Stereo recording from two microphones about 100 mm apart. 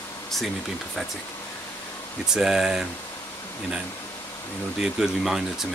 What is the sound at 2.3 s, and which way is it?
Speech, 5° right (ahead or behind).